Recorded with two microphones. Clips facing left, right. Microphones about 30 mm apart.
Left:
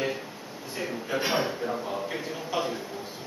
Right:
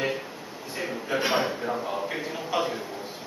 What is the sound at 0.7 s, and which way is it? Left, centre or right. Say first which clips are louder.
A man's voice: right 2 dB; centre.